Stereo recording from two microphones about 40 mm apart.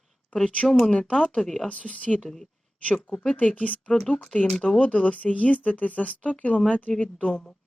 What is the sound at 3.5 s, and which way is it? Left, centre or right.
Speech, left.